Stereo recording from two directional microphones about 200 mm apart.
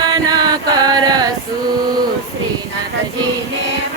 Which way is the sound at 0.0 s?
20° right (ahead or behind).